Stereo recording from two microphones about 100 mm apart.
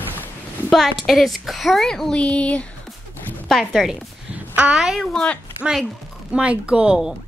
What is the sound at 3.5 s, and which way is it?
A woman's voice, centre (ahead or behind).